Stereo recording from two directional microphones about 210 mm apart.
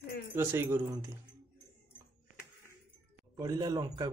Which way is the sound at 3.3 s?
15° right (ahead or behind).